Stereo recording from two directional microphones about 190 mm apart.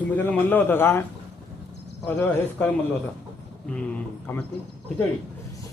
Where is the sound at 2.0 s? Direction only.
10° left (ahead or behind).